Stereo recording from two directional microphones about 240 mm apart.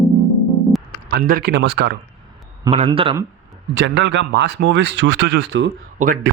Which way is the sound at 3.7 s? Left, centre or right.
Right.